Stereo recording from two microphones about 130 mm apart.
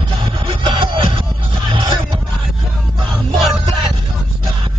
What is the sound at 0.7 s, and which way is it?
Music, 40° right (ahead or behind).